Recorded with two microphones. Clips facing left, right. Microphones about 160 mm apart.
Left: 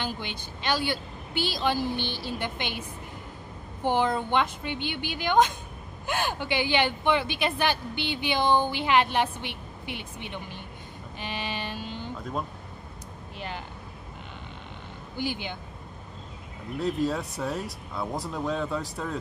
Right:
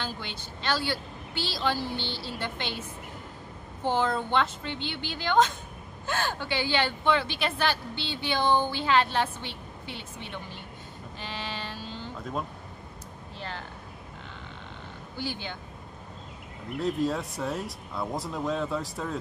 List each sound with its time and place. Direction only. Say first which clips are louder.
0.0 s a woman's voice: left 3 dB; 15° left (ahead or behind)
3.8 s a woman's voice: left 2 dB; 15° left (ahead or behind)
11.1 s vehicle: left 3 dB; 15° left (ahead or behind)
13.4 s vehicle: left 2 dB; 15° left (ahead or behind)
15.1 s a woman's voice: left 3 dB; 15° left (ahead or behind)
16.8 s speech: left 1 dB; centre (ahead or behind)